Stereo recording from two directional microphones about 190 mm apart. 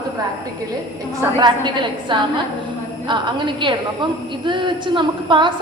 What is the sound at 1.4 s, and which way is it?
A woman's voice, 25° right (ahead or behind).